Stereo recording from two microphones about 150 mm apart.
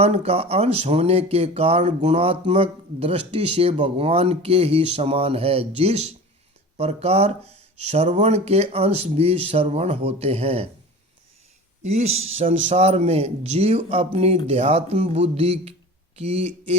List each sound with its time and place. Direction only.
0.0 s speech: 45° right (ahead or behind)
11.9 s speech: 45° right (ahead or behind)